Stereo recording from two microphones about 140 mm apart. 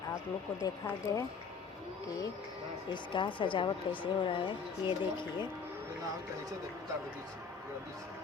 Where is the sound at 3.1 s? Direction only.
35° left (ahead or behind).